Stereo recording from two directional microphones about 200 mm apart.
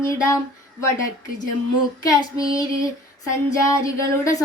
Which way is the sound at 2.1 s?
20° left (ahead or behind).